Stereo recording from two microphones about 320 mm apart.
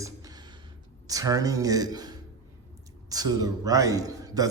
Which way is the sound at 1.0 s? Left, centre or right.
Centre.